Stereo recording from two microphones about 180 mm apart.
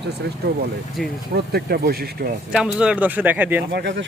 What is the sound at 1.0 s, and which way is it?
Speech, centre (ahead or behind).